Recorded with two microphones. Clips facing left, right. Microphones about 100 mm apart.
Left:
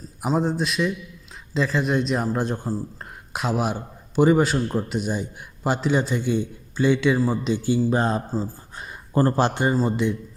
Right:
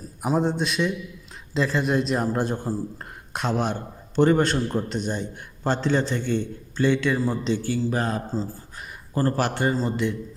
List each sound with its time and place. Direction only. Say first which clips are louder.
0.2 s a man's voice: even; centre (ahead or behind)